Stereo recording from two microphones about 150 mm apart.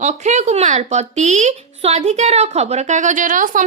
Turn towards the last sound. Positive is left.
turn(degrees=-60)  # may be behind; listen again after turning